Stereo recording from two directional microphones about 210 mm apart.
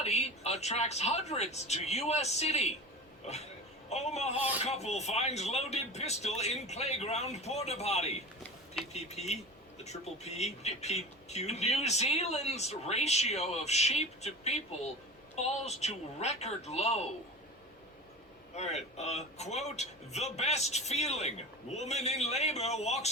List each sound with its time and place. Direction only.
0.0 s speech: 30° left (ahead or behind)
18.5 s speech: 30° left (ahead or behind)